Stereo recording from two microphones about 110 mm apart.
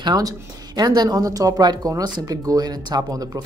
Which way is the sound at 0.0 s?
35° right (ahead or behind).